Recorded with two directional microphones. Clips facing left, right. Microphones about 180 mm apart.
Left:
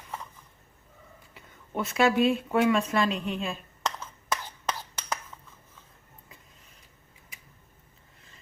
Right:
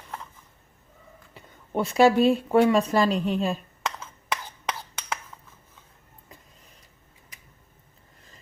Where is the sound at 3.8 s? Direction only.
Centre (ahead or behind).